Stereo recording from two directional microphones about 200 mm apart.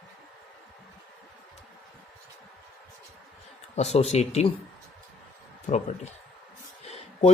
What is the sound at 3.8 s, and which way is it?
Speech, 30° left (ahead or behind).